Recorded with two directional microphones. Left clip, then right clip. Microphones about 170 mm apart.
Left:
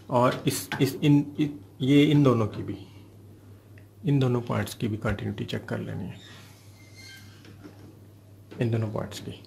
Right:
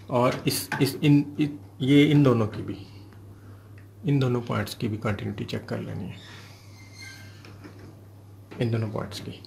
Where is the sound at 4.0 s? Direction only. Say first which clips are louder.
Even; 10° left (ahead or behind).